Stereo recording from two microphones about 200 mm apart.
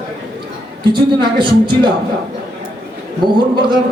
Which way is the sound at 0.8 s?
25° right (ahead or behind).